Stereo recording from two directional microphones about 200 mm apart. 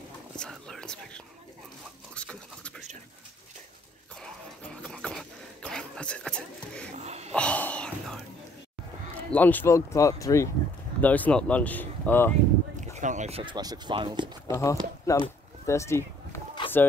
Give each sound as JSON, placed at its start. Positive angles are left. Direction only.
{"t": 0.4, "sound": "speech", "side_deg": 5}
{"t": 2.1, "sound": "a sound", "side_deg": 5}
{"t": 4.8, "sound": "a sound", "side_deg": 5}
{"t": 7.0, "sound": "snort", "side_deg": -35}
{"t": 7.3, "sound": "whispering", "side_deg": 5}
{"t": 9.3, "sound": "speech", "side_deg": 10}
{"t": 12.9, "sound": "speech", "side_deg": -35}
{"t": 14.5, "sound": "speech", "side_deg": 15}
{"t": 15.0, "sound": "a sound", "side_deg": 15}